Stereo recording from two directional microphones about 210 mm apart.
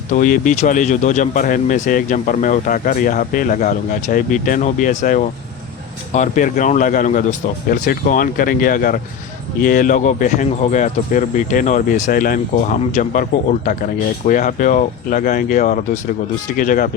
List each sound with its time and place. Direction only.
0.1 s speech: 40° left (ahead or behind)